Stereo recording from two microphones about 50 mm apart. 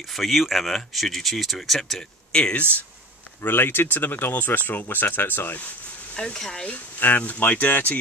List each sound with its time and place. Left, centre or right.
0.1 s speech: centre
2.3 s speech: centre
3.4 s speech: left
6.1 s speech: centre
7.0 s speech: left